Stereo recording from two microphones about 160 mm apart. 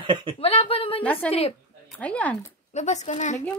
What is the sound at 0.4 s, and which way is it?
Speech, 35° left (ahead or behind).